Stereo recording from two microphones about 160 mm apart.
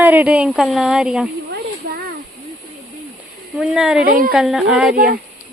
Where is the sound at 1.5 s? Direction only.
70° right (ahead or behind).